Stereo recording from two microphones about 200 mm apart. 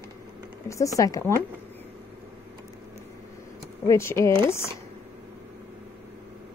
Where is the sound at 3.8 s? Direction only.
15° left (ahead or behind).